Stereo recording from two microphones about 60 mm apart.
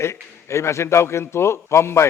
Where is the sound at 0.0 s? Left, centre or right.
Left.